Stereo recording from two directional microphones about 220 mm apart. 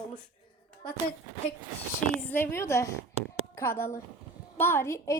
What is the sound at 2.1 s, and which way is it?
A woman's voice, 10° left (ahead or behind).